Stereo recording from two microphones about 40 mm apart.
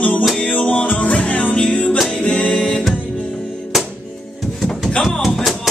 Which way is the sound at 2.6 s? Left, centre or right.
Centre.